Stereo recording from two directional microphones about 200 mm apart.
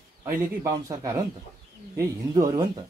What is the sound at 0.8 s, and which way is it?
A man's voice, 15° right (ahead or behind).